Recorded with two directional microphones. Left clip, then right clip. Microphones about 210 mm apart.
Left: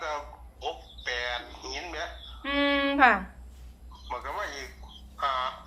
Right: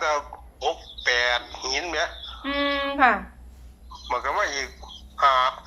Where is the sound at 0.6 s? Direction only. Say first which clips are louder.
Right 10 dB; 50° right (ahead or behind).